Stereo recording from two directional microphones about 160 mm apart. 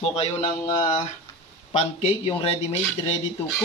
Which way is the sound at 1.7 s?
40° left (ahead or behind).